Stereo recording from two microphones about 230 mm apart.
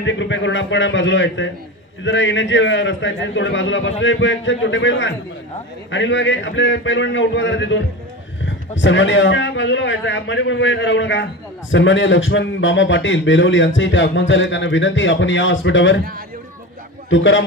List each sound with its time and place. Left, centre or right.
0.0 s a man's voice: left
17.1 s a man's voice: left